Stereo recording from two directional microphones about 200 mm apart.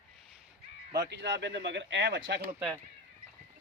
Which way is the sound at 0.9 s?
60° right (ahead or behind).